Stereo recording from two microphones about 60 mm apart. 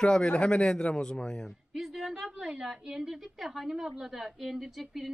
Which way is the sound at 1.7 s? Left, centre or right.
Centre.